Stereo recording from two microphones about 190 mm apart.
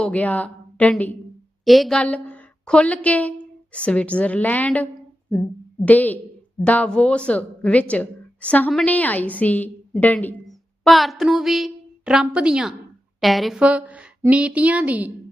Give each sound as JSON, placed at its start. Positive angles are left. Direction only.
{"t": 0.0, "sound": "a woman's voice", "side_deg": 5}